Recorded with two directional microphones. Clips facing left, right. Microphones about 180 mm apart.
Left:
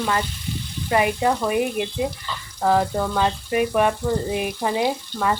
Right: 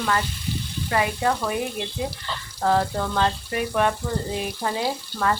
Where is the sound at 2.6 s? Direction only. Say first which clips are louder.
Left 2 dB; 10° left (ahead or behind).